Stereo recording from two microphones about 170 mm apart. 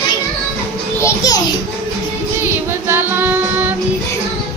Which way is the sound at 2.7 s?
15° right (ahead or behind).